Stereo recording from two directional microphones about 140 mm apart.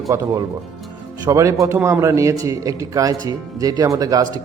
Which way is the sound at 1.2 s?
20° right (ahead or behind).